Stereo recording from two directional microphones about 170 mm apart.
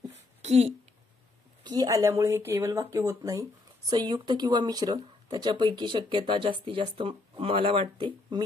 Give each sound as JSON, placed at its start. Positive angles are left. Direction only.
{"t": 0.4, "sound": "speech", "side_deg": -40}
{"t": 1.6, "sound": "speech", "side_deg": -25}